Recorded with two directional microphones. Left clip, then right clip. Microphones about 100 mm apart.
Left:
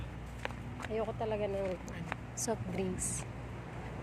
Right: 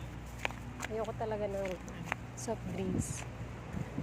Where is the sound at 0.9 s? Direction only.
30° left (ahead or behind).